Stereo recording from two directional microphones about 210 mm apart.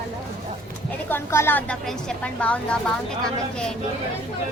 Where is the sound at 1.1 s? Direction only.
10° left (ahead or behind).